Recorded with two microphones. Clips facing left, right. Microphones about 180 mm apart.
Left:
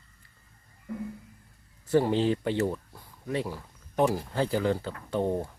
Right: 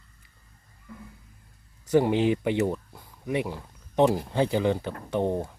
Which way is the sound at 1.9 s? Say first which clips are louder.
Right 2 dB; 15° right (ahead or behind).